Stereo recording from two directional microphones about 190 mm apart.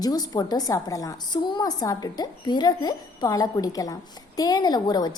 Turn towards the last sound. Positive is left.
turn(degrees=20)  # may be behind; listen again after turning